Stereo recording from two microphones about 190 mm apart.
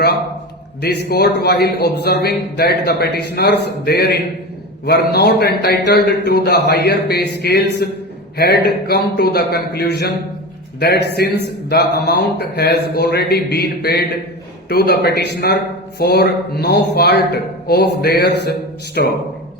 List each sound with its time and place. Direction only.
0.8 s a man's voice: 60° left (ahead or behind)